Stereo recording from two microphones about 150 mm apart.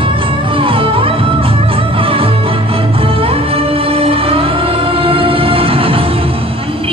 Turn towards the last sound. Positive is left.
turn(degrees=-40)  # may be behind; listen again after turning